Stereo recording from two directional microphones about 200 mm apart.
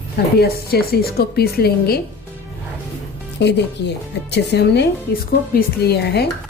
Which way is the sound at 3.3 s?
60° left (ahead or behind).